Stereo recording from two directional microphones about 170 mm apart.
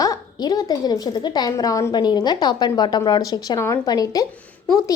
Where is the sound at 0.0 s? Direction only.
20° left (ahead or behind).